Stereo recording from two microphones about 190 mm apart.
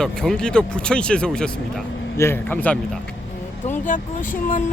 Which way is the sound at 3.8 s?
45° left (ahead or behind).